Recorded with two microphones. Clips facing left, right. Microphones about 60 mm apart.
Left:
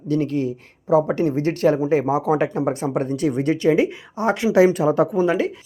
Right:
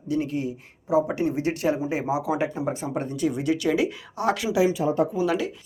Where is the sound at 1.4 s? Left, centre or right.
Left.